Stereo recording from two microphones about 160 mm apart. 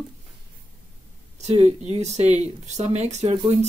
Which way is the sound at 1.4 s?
40° right (ahead or behind).